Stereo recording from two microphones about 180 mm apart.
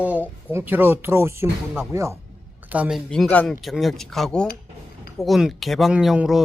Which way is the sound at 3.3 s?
5° left (ahead or behind).